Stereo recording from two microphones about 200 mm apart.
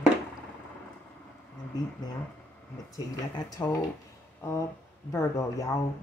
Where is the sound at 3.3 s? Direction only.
20° left (ahead or behind).